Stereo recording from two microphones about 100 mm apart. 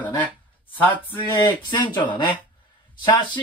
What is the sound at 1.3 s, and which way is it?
Speech, 45° left (ahead or behind).